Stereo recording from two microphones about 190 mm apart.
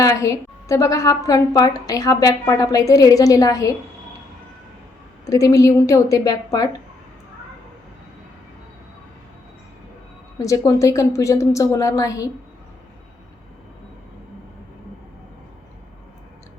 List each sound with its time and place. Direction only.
0.0 s a woman's voice: 15° left (ahead or behind)
5.2 s a woman's voice: 15° left (ahead or behind)
10.3 s a woman's voice: 15° left (ahead or behind)